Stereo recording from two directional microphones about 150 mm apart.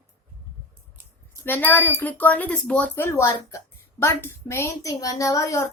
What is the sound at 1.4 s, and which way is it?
Speech, 15° left (ahead or behind).